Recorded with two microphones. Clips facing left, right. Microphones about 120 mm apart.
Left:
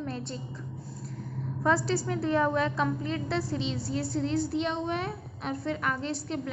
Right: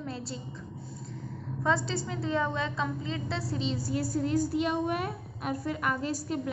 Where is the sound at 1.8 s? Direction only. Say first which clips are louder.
Left 5 dB; 20° right (ahead or behind).